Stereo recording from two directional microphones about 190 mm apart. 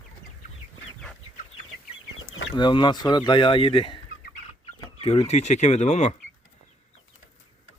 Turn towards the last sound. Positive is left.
turn(degrees=35)  # may be behind; listen again after turning